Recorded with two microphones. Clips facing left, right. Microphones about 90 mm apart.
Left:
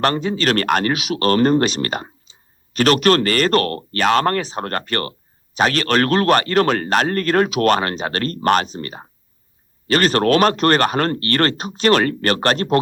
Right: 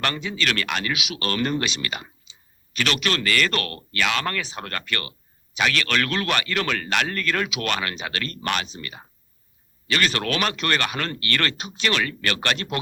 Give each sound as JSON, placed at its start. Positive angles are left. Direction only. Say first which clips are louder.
{"t": 0.0, "sound": "speech", "louder": "left 8 dB", "side_deg": 40}